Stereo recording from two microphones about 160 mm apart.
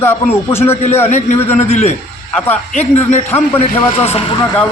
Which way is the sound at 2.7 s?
45° left (ahead or behind).